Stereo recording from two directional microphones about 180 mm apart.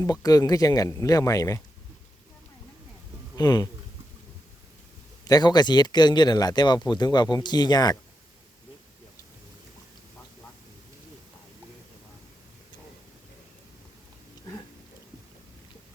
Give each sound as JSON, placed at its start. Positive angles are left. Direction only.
{"t": 0.0, "sound": "speech", "side_deg": 20}
{"t": 3.3, "sound": "speech", "side_deg": 20}
{"t": 5.3, "sound": "speech", "side_deg": 25}